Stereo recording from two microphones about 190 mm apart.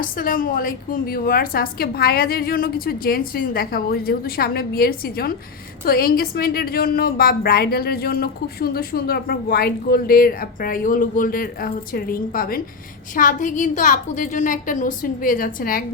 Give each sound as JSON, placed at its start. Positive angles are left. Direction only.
{"t": 0.0, "sound": "a woman's voice", "side_deg": 45}